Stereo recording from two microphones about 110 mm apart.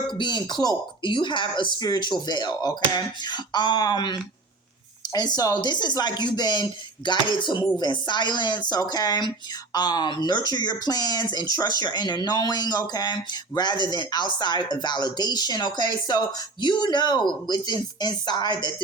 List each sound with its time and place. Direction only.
0.1 s speech: 40° left (ahead or behind)